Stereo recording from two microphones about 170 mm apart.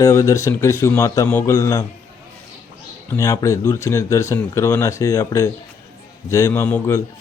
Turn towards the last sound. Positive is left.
turn(degrees=10)  # may be behind; listen again after turning